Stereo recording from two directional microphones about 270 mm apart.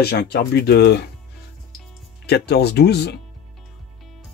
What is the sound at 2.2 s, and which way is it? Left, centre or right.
Speech, left.